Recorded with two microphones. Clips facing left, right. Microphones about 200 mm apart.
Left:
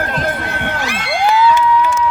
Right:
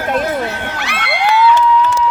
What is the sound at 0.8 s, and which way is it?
Crowd, 65° right (ahead or behind).